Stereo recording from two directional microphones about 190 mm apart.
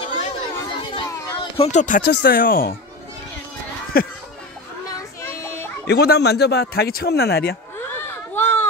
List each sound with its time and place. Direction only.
0.9 s a sound: 30° left (ahead or behind)
2.0 s speech: 50° left (ahead or behind)
3.9 s speech: 50° left (ahead or behind)
4.9 s children playing: 15° left (ahead or behind)
5.9 s speech: 60° left (ahead or behind)
7.9 s a sound: 10° left (ahead or behind)